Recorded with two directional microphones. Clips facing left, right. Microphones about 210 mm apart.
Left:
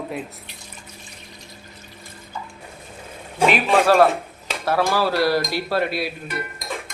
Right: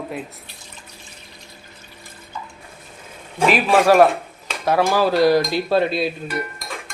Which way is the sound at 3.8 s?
15° right (ahead or behind).